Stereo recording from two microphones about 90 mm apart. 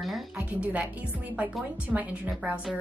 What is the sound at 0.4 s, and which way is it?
Speech, 15° right (ahead or behind).